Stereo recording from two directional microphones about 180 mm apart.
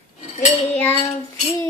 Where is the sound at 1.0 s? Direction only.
35° left (ahead or behind).